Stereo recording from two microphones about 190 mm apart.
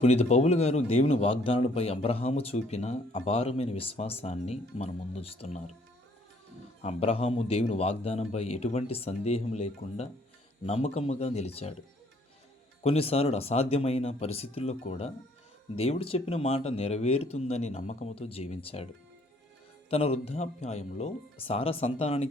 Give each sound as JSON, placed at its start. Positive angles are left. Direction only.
{"t": 0.0, "sound": "speech", "side_deg": 35}
{"t": 6.8, "sound": "speech", "side_deg": 30}
{"t": 12.8, "sound": "speech", "side_deg": 30}
{"t": 19.9, "sound": "speech", "side_deg": 30}